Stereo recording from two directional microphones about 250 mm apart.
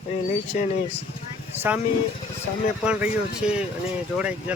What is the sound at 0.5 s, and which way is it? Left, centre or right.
Speech, left.